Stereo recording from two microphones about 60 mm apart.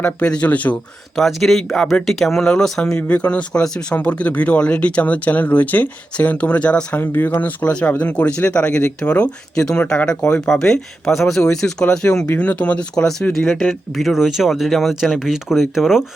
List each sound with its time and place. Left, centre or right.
0.0 s speech: left
1.1 s speech: centre; by 7.0 s left
7.0 s speech: left
10.4 s speech: centre
13.4 s speech: centre
13.7 s speech: centre